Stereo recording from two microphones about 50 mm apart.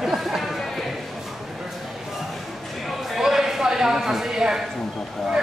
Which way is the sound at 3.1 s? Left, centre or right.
Centre.